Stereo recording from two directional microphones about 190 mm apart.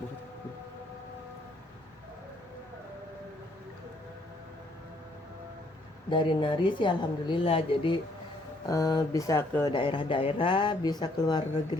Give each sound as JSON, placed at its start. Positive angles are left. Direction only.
{"t": 6.1, "sound": "a woman's voice", "side_deg": 25}
{"t": 9.7, "sound": "a woman's voice", "side_deg": 25}